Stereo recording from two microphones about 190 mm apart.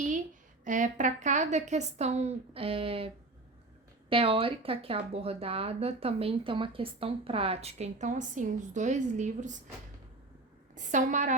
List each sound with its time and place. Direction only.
0.6 s speech: 40° right (ahead or behind)
4.1 s speech: 30° right (ahead or behind)
10.8 s speech: 40° right (ahead or behind)